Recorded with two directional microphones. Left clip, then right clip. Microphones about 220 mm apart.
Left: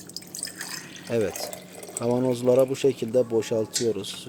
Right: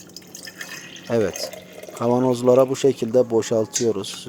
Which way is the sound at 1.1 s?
15° right (ahead or behind).